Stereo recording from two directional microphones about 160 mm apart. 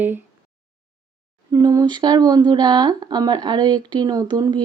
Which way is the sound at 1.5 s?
20° right (ahead or behind).